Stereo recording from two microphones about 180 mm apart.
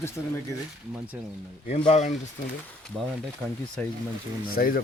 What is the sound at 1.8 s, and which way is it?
Speech, 40° left (ahead or behind).